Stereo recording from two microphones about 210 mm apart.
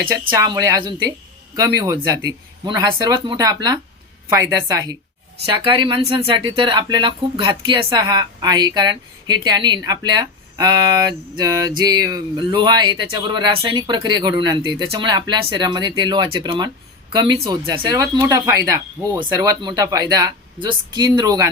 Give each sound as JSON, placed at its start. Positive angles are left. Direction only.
{"t": 0.1, "sound": "speech", "side_deg": -15}